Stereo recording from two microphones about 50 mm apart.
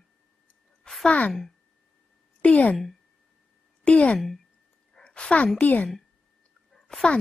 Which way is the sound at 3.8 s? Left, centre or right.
Left.